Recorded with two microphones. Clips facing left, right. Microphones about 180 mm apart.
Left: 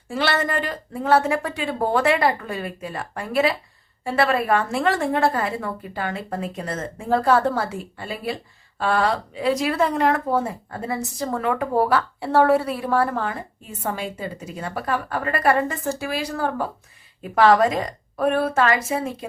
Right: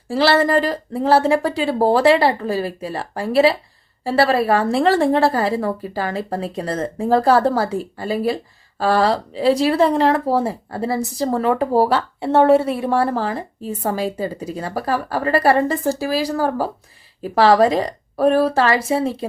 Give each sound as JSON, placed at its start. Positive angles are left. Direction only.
{"t": 0.1, "sound": "speech", "side_deg": -35}